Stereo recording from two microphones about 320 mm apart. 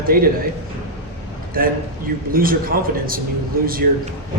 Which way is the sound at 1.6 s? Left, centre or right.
Right.